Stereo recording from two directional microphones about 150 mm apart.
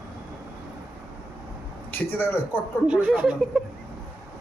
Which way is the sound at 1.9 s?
15° left (ahead or behind).